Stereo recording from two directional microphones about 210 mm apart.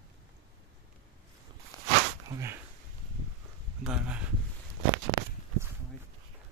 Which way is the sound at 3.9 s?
5° right (ahead or behind).